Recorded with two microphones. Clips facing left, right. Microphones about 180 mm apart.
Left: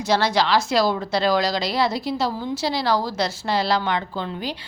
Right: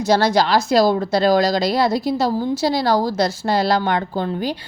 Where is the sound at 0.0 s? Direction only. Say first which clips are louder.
Right 4 dB; 40° right (ahead or behind).